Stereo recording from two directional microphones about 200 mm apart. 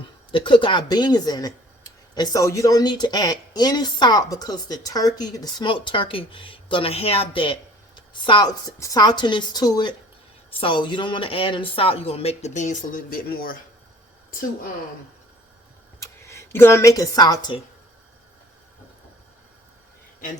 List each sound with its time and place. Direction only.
0.3 s a woman's voice: 25° left (ahead or behind); by 14.5 s 45° left (ahead or behind)
16.0 s speech: 15° left (ahead or behind)